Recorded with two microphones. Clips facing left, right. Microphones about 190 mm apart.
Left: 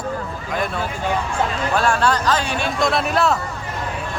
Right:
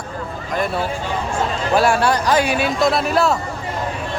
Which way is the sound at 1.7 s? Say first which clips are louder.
Right 3 dB; 10° right (ahead or behind).